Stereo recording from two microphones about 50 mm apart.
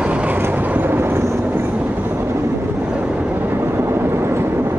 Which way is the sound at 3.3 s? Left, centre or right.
Right.